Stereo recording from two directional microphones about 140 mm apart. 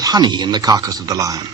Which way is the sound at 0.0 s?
30° right (ahead or behind).